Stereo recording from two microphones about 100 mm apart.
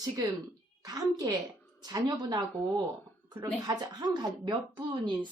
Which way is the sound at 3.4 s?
40° right (ahead or behind).